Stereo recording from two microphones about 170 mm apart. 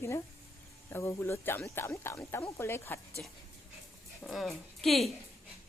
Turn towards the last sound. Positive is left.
turn(degrees=0)  # may be behind; listen again after turning